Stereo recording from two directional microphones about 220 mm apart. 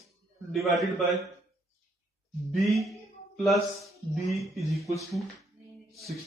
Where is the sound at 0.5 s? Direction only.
Centre (ahead or behind).